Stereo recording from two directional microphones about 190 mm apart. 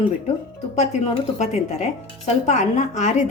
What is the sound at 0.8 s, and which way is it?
Speech, 35° left (ahead or behind).